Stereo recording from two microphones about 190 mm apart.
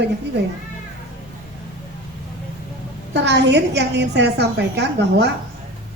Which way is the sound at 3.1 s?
65° right (ahead or behind).